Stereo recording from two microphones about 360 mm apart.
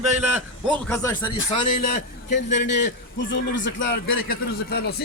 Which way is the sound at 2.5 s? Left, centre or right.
Left.